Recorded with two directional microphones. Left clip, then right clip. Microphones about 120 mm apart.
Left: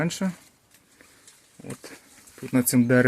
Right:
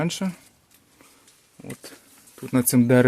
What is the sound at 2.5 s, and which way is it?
Speech, 25° right (ahead or behind).